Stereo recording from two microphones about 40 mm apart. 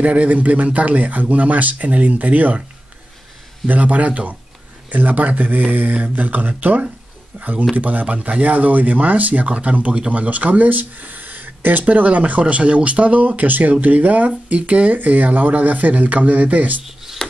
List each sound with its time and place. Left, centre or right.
0.0 s speech: right
3.6 s speech: right
7.3 s speech: right
11.8 s speech: right
16.8 s a sound: centre